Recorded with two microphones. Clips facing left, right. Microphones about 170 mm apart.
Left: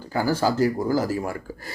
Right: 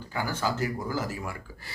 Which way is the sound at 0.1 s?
35° left (ahead or behind).